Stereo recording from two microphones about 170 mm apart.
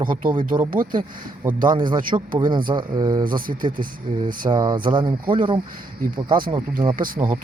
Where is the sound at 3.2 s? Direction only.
55° right (ahead or behind).